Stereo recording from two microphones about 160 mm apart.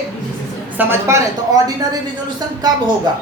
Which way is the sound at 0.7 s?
15° right (ahead or behind).